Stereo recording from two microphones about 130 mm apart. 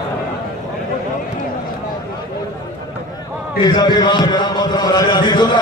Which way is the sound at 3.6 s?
35° left (ahead or behind).